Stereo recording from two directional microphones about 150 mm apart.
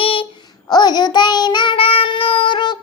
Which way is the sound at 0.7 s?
25° left (ahead or behind).